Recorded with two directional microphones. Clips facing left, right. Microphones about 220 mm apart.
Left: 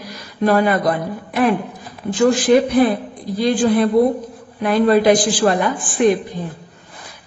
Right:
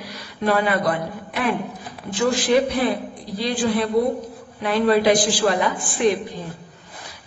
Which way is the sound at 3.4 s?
50° left (ahead or behind).